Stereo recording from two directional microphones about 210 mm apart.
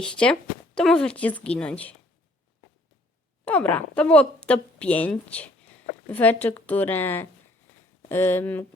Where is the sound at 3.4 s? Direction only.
5° left (ahead or behind).